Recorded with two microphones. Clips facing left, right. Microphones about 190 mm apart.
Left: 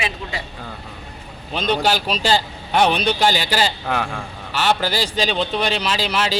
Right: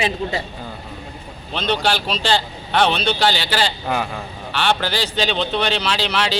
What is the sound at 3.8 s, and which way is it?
Speech, 5° right (ahead or behind).